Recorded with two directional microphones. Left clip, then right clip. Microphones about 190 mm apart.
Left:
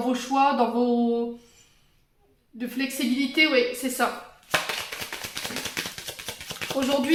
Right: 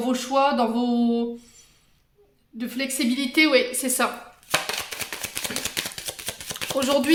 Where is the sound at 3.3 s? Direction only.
45° right (ahead or behind).